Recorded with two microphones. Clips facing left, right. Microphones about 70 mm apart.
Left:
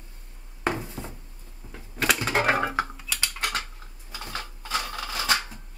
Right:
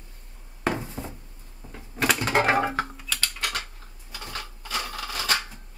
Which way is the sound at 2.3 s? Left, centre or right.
Centre.